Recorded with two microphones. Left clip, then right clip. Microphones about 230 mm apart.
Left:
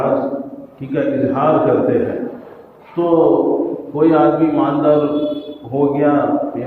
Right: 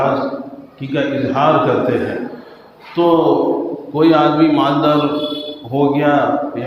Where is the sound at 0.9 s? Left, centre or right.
Right.